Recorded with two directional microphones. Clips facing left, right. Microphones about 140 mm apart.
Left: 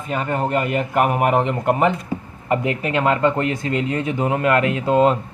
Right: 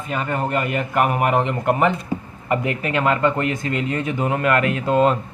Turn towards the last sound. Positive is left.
turn(degrees=20)  # may be behind; listen again after turning